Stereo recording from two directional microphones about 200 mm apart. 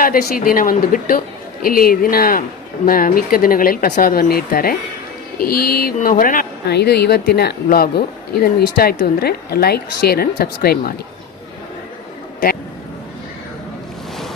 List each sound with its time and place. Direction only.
0.0 s speech: 45° left (ahead or behind)